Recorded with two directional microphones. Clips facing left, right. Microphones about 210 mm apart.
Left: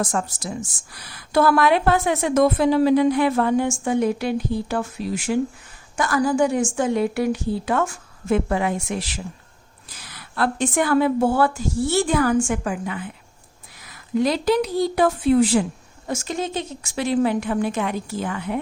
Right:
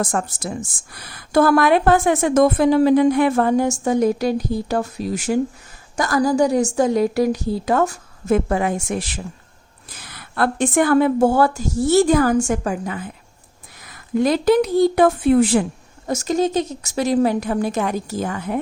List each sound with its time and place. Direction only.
0.0 s a woman's voice: 55° right (ahead or behind)
16.0 s a woman's voice: 40° right (ahead or behind)